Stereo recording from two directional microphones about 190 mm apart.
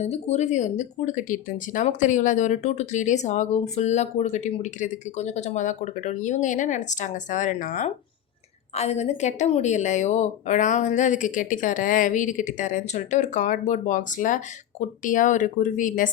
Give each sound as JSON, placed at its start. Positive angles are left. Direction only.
{"t": 0.0, "sound": "speech", "side_deg": 35}